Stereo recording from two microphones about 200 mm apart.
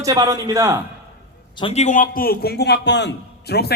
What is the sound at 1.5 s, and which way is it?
A man's voice, 30° left (ahead or behind).